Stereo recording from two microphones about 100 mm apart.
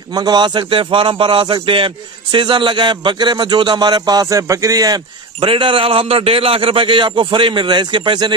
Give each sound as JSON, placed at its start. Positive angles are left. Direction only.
{"t": 0.1, "sound": "a man's voice", "side_deg": -45}
{"t": 5.4, "sound": "a man's voice", "side_deg": -55}